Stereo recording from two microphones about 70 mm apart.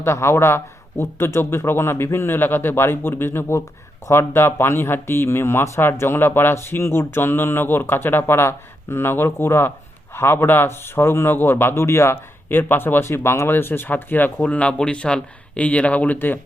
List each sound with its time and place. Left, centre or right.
0.0 s speech: left
12.5 s speech: left